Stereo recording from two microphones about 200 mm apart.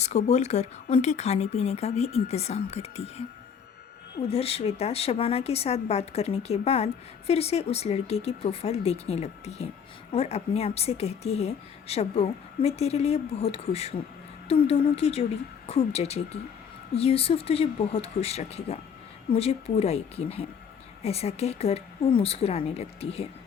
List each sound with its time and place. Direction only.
0.0 s speech: 35° left (ahead or behind)
4.3 s speech: 30° left (ahead or behind)